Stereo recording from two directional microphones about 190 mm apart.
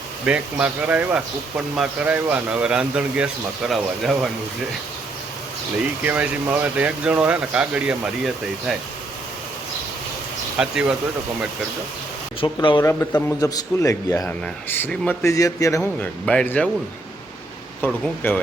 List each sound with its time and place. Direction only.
0.3 s speech: 5° right (ahead or behind)
6.0 s speech: 10° right (ahead or behind)
10.6 s speech: 5° right (ahead or behind)
12.4 s a man's voice: 25° left (ahead or behind)
15.8 s speech: 5° left (ahead or behind)
17.8 s a man's voice: 10° left (ahead or behind)